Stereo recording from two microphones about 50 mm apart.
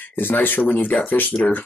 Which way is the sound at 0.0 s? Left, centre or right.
Left.